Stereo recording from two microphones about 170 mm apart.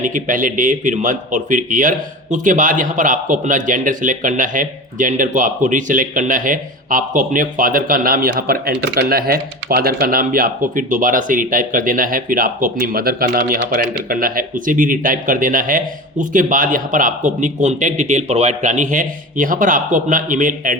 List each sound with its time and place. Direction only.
0.0 s speech: 50° right (ahead or behind)